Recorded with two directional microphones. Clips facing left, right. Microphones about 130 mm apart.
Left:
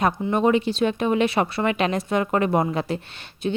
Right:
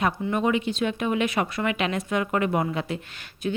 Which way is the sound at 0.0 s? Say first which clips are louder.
Left 4 dB; 35° left (ahead or behind).